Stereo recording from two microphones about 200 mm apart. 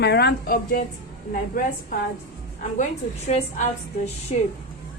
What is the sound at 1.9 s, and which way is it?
Speech, 45° left (ahead or behind).